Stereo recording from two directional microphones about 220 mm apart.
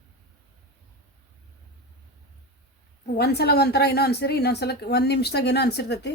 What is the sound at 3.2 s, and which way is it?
A woman's voice, 45° left (ahead or behind).